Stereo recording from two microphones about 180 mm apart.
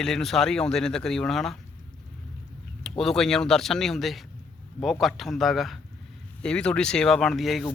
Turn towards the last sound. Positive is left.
turn(degrees=0)  # may be behind; listen again after turning